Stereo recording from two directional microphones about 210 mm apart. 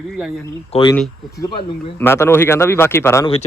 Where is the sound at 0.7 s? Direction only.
20° left (ahead or behind).